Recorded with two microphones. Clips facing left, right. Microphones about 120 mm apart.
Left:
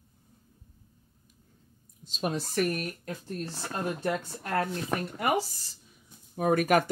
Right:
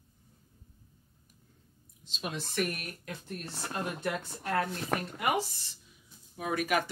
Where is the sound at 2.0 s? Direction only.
45° left (ahead or behind).